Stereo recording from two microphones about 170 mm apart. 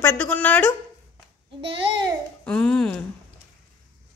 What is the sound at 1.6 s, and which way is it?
Speech, 30° right (ahead or behind).